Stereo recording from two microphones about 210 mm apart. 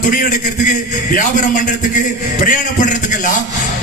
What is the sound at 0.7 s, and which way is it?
Music, 40° left (ahead or behind).